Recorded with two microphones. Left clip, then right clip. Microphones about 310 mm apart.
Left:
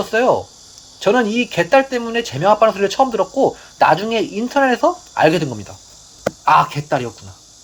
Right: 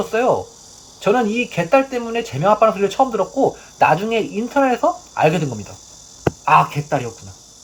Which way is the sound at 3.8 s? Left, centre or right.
Left.